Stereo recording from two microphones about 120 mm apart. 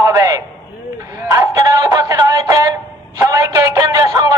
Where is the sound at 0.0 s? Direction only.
30° right (ahead or behind).